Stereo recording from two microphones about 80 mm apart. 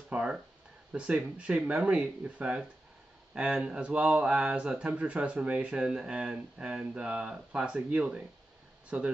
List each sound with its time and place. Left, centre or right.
0.1 s speech: centre